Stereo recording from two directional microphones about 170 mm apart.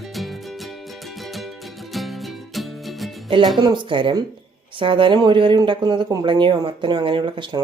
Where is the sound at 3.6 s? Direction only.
25° right (ahead or behind).